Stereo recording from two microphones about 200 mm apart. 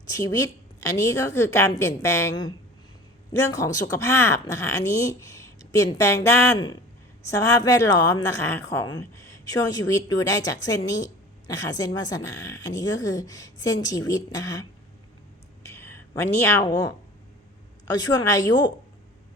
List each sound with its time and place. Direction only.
0.8 s a woman's voice: 15° left (ahead or behind)